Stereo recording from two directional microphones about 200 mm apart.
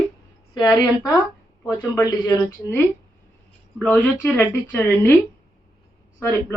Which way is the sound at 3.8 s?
10° left (ahead or behind).